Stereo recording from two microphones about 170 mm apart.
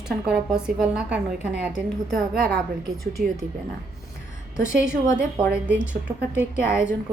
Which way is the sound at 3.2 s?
60° right (ahead or behind).